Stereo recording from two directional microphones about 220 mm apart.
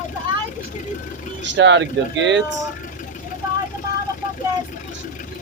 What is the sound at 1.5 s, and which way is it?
Speech, 55° right (ahead or behind).